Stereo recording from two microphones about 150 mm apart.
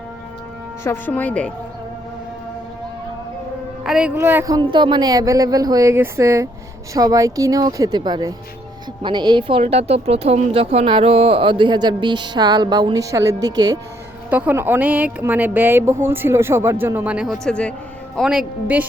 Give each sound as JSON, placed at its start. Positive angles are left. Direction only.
{"t": 0.9, "sound": "speech", "side_deg": 10}
{"t": 3.8, "sound": "speech", "side_deg": -5}
{"t": 4.4, "sound": "speech", "side_deg": -30}
{"t": 14.3, "sound": "speech", "side_deg": -10}
{"t": 18.2, "sound": "a woman's voice", "side_deg": -5}